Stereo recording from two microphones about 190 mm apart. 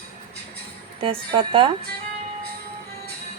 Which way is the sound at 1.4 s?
25° right (ahead or behind).